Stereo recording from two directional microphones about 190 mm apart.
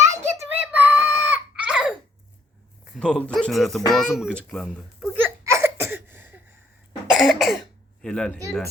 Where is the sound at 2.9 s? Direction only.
5° left (ahead or behind).